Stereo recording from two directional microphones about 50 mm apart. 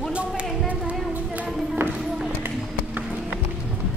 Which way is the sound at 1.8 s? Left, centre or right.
Right.